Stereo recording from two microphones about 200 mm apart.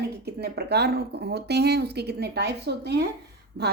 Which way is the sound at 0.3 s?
55° right (ahead or behind).